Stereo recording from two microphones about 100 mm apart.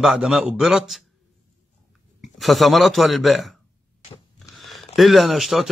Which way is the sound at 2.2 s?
Centre (ahead or behind).